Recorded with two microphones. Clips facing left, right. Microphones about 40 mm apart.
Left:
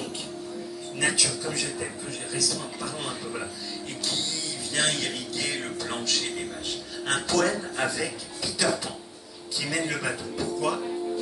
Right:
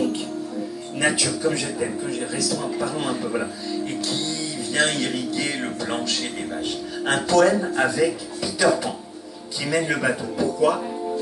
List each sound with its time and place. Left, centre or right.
0.9 s a man's voice: centre
3.3 s speech: right
4.0 s music: centre
5.9 s a man's voice: centre